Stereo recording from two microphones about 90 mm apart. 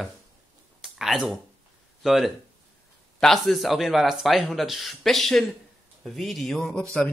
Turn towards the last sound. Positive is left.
turn(degrees=10)  # may be behind; listen again after turning